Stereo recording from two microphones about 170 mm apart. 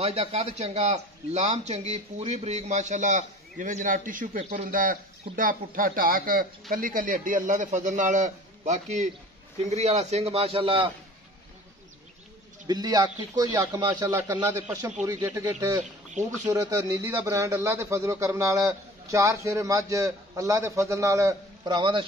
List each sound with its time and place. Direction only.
0.0 s a man's voice: 35° right (ahead or behind)
12.6 s speech: 25° right (ahead or behind)
15.8 s a sound: 45° right (ahead or behind)
16.4 s speech: 20° right (ahead or behind)